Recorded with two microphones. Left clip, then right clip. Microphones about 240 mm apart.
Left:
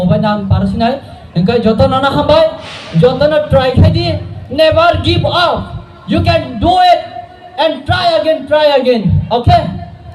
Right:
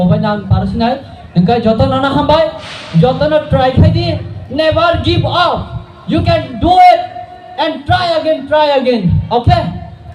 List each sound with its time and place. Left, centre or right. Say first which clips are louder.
0.1 s music: left 2 dB; left
1.3 s a man's voice: even; left